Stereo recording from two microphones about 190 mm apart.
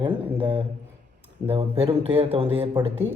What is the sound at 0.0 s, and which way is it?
Speech, 25° right (ahead or behind).